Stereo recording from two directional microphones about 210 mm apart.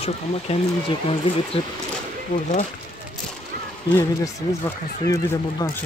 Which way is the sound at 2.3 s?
40° left (ahead or behind).